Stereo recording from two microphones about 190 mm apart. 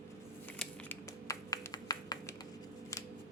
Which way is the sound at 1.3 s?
20° left (ahead or behind).